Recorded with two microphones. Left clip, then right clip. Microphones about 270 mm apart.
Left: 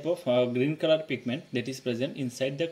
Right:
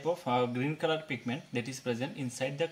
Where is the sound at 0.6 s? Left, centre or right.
Right.